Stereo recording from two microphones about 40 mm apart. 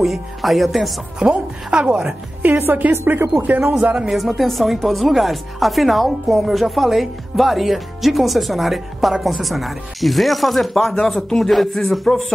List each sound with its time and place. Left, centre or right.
0.0 s speech: centre
1.2 s a woman's voice: right
2.5 s a woman's voice: right
2.9 s speech: right
4.1 s speech: centre